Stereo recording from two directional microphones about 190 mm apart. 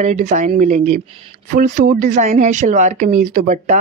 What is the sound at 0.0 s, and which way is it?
Speech, 40° right (ahead or behind).